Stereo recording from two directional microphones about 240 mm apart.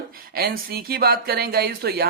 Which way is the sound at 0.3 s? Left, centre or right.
Right.